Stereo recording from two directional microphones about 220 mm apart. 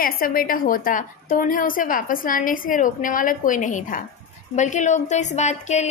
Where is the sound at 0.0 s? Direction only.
40° left (ahead or behind).